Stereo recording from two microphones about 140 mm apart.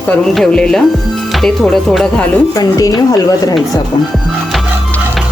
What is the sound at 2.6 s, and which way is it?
Speech, 25° left (ahead or behind).